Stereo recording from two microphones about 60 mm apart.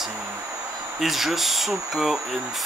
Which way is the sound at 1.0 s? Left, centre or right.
Centre.